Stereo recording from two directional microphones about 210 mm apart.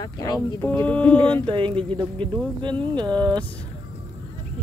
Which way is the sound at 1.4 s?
25° right (ahead or behind).